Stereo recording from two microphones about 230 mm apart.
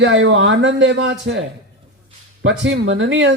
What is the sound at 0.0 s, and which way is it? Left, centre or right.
Speech, right.